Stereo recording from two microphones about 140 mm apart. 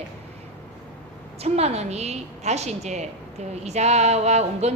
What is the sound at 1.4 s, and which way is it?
A woman's voice, 50° right (ahead or behind).